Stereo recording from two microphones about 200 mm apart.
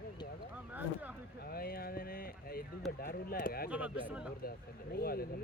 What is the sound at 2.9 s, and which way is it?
Speech, 50° left (ahead or behind).